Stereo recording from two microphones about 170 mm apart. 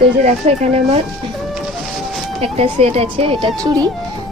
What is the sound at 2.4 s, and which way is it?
A woman's voice, 35° right (ahead or behind).